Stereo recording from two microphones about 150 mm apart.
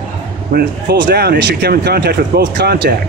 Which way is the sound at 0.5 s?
90° right.